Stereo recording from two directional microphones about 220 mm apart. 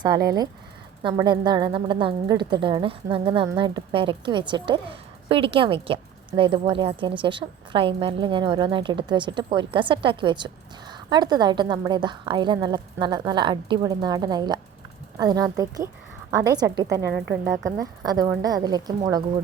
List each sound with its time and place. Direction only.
0.0 s a woman's voice: 15° right (ahead or behind)
17.2 s a woman's voice: 5° right (ahead or behind)